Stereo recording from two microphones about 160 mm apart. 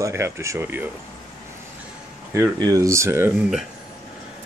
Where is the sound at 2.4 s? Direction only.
20° right (ahead or behind).